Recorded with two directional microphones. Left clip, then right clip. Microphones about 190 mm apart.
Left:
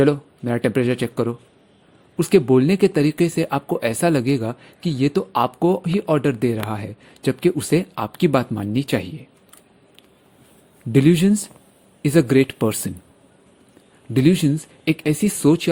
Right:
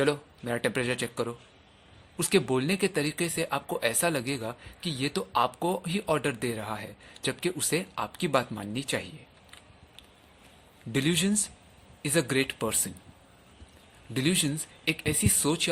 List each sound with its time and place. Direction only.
0.0 s speech: 40° left (ahead or behind)
10.9 s speech: 40° left (ahead or behind)
14.1 s speech: 40° left (ahead or behind)